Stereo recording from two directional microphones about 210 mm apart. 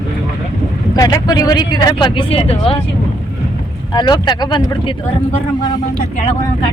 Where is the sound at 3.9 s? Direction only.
20° left (ahead or behind).